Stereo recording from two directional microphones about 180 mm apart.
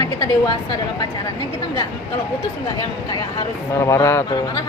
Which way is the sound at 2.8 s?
25° left (ahead or behind).